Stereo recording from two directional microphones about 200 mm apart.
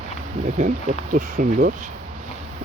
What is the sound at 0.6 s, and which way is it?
Speech, 40° right (ahead or behind).